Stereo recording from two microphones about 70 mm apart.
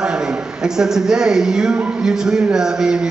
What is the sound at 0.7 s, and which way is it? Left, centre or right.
Speech, centre.